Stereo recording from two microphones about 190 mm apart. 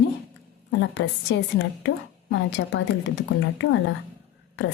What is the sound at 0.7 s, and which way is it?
A woman's voice, 70° left (ahead or behind).